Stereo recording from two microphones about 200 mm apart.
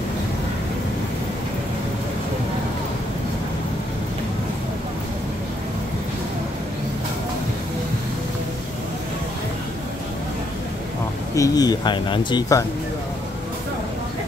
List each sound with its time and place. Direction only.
11.3 s speech: 15° left (ahead or behind)